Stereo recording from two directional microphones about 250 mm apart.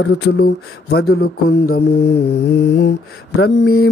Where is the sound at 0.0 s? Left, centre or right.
Left.